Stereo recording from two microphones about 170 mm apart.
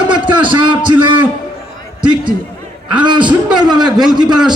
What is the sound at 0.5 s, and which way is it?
Speech, 30° right (ahead or behind).